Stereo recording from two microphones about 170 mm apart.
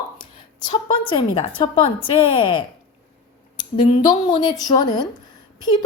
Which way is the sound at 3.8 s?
30° left (ahead or behind).